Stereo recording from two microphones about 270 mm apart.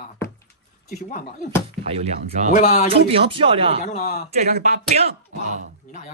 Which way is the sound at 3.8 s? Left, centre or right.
Left.